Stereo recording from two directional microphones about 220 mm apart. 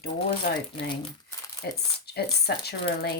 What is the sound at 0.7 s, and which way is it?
Speech, 20° left (ahead or behind).